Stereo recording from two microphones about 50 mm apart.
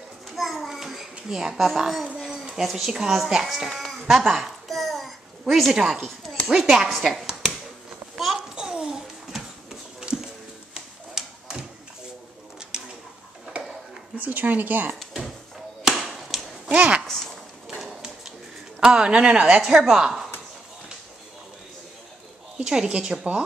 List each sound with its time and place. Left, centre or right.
0.4 s a sound: centre
1.3 s a woman's voice: centre
4.1 s babbling: centre
5.5 s a woman's voice: centre
8.5 s babbling: centre
9.0 s a sound: centre
14.1 s speech: right
15.8 s chop: centre
16.6 s speech: right
17.0 s a sound: centre
18.8 s a woman's voice: centre
19.6 s a woman's voice: centre
22.6 s a woman's voice: centre